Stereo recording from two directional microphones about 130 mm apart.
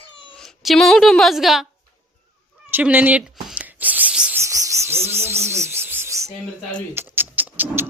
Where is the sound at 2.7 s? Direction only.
15° right (ahead or behind).